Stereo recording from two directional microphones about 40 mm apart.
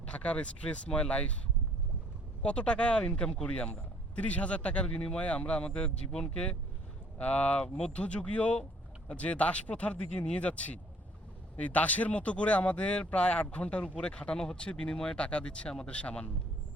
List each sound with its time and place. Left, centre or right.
0.0 s speech: left
2.4 s speech: left
3.4 s speech: left
7.2 s speech: left
7.6 s speech: left